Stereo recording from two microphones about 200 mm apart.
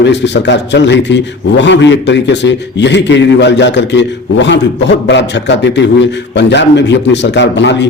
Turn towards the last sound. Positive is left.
turn(degrees=60)  # may be behind; listen again after turning